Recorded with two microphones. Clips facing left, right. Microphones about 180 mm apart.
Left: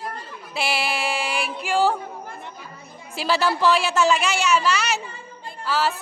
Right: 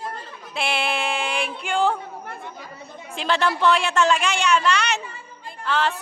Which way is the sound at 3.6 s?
5° left (ahead or behind).